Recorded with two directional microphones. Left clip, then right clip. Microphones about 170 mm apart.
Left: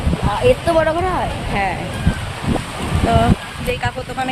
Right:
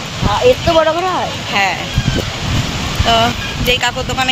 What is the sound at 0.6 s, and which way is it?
Speech, 40° right (ahead or behind).